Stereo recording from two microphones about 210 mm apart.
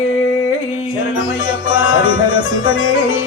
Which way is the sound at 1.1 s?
75° left (ahead or behind).